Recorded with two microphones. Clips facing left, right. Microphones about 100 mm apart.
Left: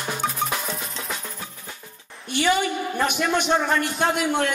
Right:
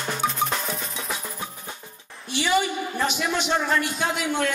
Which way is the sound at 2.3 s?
55° left (ahead or behind).